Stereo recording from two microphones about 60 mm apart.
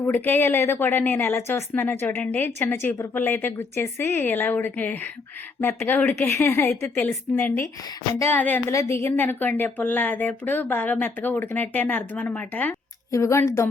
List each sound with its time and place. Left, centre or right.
0.0 s speech: left
0.4 s speech: left
2.0 s speech: left
6.2 s speech: left
8.7 s a woman's voice: left
9.0 s speech: left
13.1 s speech: left